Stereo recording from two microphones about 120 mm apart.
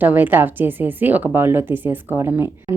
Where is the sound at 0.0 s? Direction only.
15° right (ahead or behind).